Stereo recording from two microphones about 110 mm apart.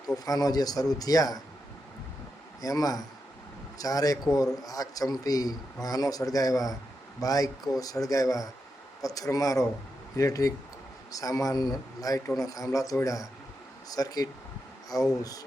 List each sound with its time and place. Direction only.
0.3 s a man's voice: 35° left (ahead or behind)
2.6 s a man's voice: 35° left (ahead or behind)